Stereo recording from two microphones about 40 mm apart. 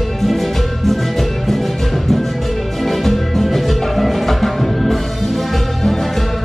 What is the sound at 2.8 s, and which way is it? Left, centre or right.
Music, centre.